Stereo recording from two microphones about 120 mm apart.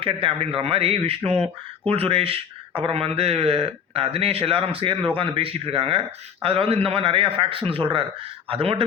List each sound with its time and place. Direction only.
0.0 s speech: 50° right (ahead or behind)
1.3 s speech: 5° left (ahead or behind)
1.9 s speech: 50° right (ahead or behind)